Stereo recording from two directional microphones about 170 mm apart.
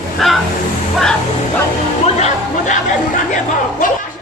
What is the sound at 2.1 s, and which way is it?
Music, 40° left (ahead or behind).